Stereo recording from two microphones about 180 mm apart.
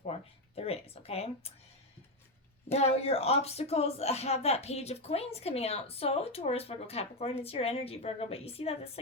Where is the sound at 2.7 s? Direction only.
35° left (ahead or behind).